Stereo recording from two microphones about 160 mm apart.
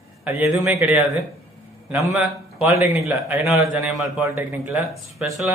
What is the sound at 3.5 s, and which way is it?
Speech, centre (ahead or behind).